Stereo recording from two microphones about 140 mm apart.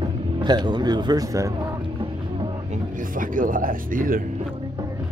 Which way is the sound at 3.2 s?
75° right (ahead or behind).